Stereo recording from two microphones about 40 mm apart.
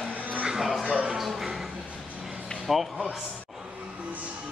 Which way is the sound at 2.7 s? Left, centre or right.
Centre.